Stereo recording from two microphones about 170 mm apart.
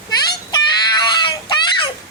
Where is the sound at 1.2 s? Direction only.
30° left (ahead or behind).